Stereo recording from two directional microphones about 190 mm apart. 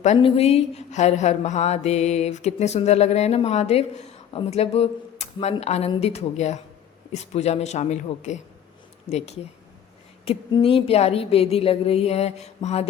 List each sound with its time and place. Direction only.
0.0 s a woman's voice: 30° left (ahead or behind)